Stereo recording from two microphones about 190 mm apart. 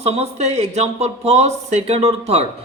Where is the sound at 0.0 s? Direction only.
35° right (ahead or behind).